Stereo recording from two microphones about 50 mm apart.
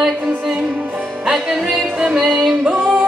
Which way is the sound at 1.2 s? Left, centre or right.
Centre.